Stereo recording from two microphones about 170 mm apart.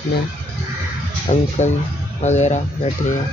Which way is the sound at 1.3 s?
45° left (ahead or behind).